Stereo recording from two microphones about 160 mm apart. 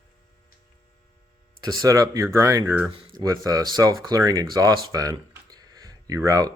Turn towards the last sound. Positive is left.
turn(degrees=-20)  # may be behind; listen again after turning